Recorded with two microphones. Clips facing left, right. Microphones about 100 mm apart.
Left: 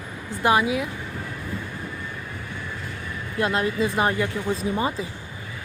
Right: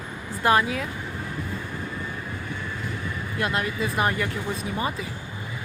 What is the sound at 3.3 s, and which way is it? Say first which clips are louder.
Speech: left 4 dB; 30° left (ahead or behind).